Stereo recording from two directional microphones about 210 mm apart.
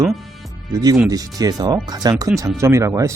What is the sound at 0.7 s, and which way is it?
A man's voice, 20° right (ahead or behind).